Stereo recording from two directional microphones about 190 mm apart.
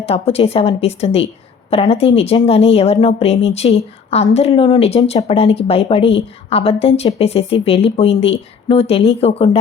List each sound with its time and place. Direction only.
0.0 s a woman's voice: 30° left (ahead or behind)